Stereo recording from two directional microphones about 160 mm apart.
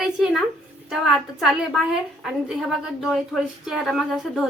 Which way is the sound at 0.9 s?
Centre (ahead or behind).